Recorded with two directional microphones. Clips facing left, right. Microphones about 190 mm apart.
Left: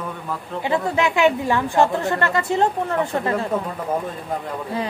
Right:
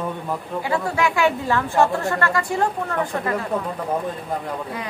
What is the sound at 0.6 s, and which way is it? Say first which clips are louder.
Speech: left 2 dB; 20° left (ahead or behind).